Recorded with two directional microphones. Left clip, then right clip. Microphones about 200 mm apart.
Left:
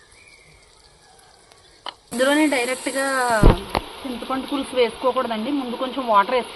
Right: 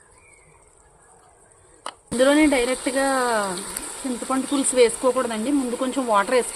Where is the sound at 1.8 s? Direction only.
50° right (ahead or behind).